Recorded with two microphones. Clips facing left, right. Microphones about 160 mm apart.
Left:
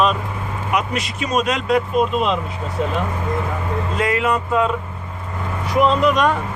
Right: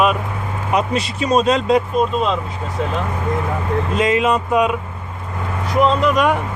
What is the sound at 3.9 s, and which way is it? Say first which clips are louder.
Speech: right 3 dB; 20° right (ahead or behind).